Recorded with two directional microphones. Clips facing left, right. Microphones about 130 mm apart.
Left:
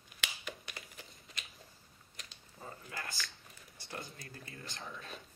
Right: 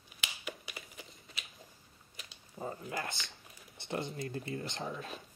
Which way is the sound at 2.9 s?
20° right (ahead or behind).